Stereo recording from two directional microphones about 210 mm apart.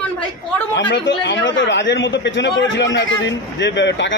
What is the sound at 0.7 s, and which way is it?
Speech, 55° left (ahead or behind).